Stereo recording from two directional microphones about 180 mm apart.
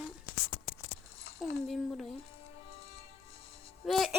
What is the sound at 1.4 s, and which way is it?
Speech, centre (ahead or behind).